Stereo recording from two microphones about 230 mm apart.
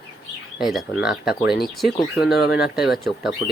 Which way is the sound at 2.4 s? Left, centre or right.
Left.